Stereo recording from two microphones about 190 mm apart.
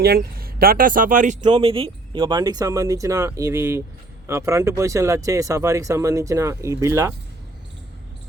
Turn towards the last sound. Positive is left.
turn(degrees=-15)  # may be behind; listen again after turning